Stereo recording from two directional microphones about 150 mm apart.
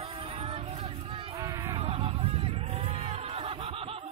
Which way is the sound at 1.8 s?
40° right (ahead or behind).